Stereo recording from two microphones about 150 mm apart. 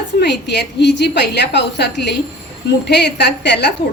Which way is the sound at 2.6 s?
90° left.